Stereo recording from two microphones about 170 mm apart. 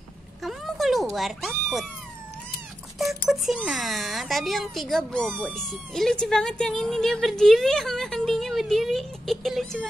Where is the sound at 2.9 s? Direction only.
Centre (ahead or behind).